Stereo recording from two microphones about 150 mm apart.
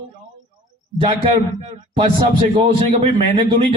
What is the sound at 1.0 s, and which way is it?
A man's voice, 40° right (ahead or behind).